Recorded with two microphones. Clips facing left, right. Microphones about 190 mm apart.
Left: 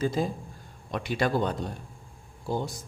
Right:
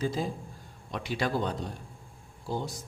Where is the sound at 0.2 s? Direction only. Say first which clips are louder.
Left 4 dB; 50° left (ahead or behind).